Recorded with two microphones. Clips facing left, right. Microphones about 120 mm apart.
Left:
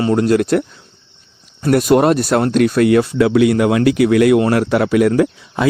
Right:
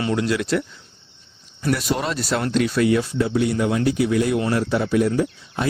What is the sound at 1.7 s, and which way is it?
Speech, 55° left (ahead or behind).